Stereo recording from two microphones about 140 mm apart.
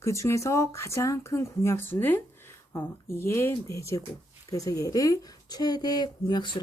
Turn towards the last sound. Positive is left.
turn(degrees=30)  # may be behind; listen again after turning